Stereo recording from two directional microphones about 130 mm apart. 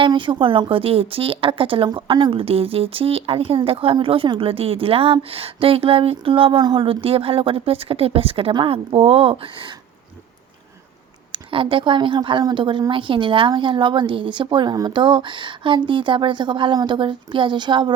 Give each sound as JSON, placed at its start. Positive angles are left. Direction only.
{"t": 0.0, "sound": "speech", "side_deg": -40}
{"t": 11.3, "sound": "speech", "side_deg": -40}